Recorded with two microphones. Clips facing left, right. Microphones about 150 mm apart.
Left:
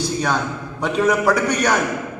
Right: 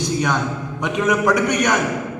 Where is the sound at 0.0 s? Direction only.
15° right (ahead or behind).